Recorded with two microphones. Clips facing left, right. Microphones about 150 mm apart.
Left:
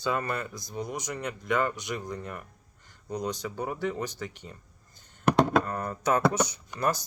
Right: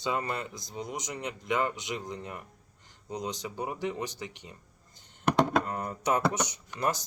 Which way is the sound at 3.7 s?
45° left (ahead or behind).